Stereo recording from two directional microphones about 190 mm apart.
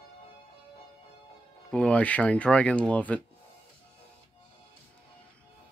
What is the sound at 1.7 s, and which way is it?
Speech, 5° left (ahead or behind).